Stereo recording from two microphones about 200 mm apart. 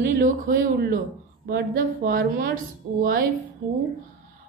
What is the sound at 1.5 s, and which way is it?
Speech, 50° right (ahead or behind).